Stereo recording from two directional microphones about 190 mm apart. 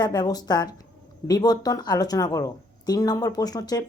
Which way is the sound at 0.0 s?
20° left (ahead or behind).